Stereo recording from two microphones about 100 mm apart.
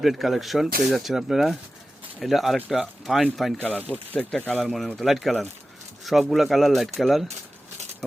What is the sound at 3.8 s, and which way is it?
Speech, 15° left (ahead or behind).